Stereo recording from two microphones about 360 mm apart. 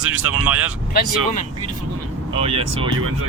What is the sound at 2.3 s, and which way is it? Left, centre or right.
Speech, centre.